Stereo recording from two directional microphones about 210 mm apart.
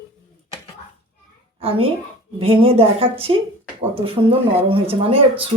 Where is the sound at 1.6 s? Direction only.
25° right (ahead or behind).